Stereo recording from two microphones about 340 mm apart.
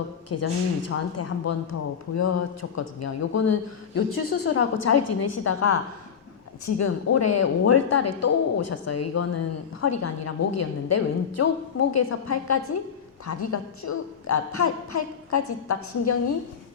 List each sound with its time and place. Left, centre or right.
0.3 s a man's voice: left